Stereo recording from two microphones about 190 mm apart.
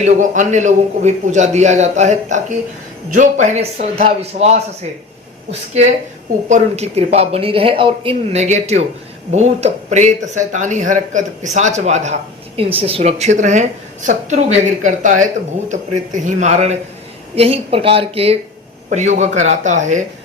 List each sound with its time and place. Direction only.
0.0 s a man's voice: 40° right (ahead or behind)